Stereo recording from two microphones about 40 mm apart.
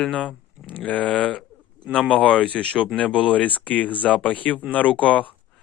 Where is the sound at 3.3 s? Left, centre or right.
Left.